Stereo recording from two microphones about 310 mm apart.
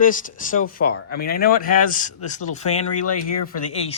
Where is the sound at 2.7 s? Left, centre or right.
Left.